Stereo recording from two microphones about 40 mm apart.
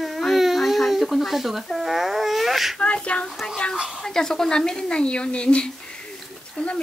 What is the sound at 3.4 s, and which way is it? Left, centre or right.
Speech, centre.